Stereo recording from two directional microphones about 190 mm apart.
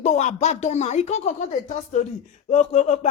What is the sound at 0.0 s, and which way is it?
Speech, 35° left (ahead or behind).